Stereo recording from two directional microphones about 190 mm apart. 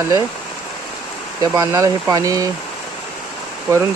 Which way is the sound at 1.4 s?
20° right (ahead or behind).